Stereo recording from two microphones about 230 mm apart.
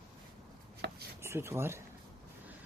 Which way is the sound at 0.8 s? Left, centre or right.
Right.